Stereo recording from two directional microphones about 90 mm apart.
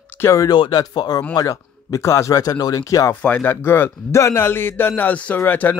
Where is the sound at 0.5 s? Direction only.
50° left (ahead or behind).